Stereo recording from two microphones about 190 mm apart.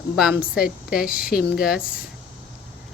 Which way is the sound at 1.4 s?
55° left (ahead or behind).